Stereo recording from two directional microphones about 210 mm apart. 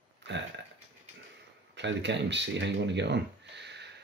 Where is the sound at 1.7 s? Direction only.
55° right (ahead or behind).